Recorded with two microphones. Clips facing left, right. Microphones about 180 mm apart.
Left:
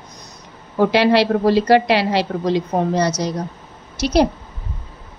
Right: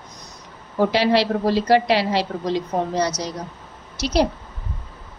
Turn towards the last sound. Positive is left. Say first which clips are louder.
# left 4 dB
turn(degrees=55)  # may be behind; listen again after turning